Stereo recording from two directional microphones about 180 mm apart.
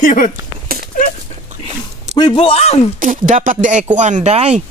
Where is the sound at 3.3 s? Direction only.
45° right (ahead or behind).